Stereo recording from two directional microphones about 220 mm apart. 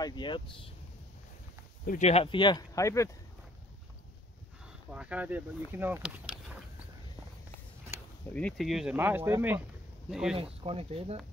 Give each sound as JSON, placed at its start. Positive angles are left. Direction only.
{"t": 0.0, "sound": "speech", "side_deg": 20}
{"t": 1.9, "sound": "speech", "side_deg": 30}
{"t": 4.9, "sound": "speech", "side_deg": -5}
{"t": 8.3, "sound": "speech", "side_deg": 5}
{"t": 10.3, "sound": "speech", "side_deg": -25}